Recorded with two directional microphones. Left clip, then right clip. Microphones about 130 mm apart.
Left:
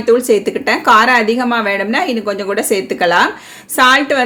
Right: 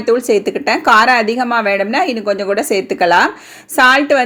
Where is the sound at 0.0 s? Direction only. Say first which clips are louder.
Left 2 dB; 50° right (ahead or behind).